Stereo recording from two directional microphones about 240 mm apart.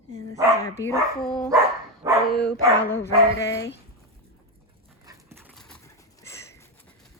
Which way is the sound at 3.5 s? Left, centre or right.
Left.